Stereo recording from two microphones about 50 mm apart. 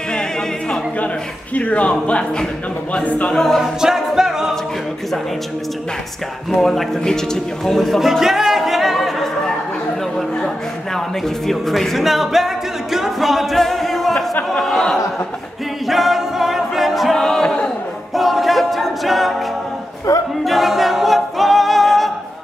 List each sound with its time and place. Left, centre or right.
0.1 s music: centre
0.9 s a man's voice: left
3.3 s speech: centre
3.8 s music: centre
6.5 s a man's voice: centre
11.0 s music: centre
14.6 s speech: centre
15.9 s a capella: centre
17.1 s music: centre
18.1 s a capella: centre
20.1 s a capella: left
20.4 s a capella: centre